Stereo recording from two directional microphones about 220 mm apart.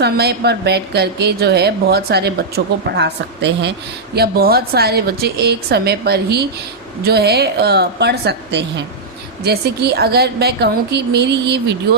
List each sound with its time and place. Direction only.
0.0 s a woman's voice: 50° right (ahead or behind)